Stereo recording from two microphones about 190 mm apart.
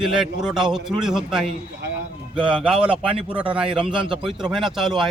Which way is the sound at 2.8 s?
25° right (ahead or behind).